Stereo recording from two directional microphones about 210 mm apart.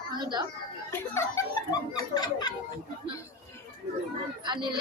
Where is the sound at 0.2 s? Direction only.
20° right (ahead or behind).